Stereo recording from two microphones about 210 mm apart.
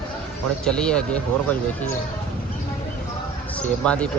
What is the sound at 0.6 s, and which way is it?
Speech, 5° left (ahead or behind).